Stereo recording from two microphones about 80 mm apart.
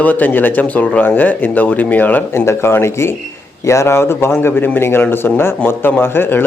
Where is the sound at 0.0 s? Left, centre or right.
Left.